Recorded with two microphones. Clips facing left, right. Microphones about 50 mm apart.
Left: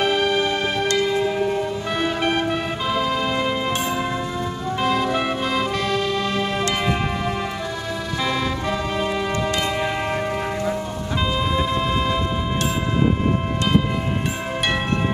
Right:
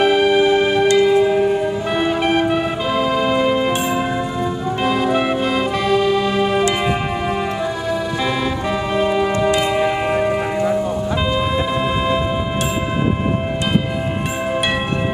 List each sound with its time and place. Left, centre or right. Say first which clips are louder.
0.0 s music: right 6 dB; centre
8.6 s music: right 5 dB; centre